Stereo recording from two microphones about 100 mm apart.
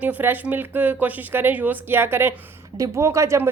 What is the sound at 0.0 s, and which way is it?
Speech, 20° right (ahead or behind).